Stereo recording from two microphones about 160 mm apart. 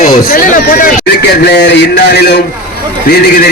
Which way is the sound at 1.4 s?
90° left.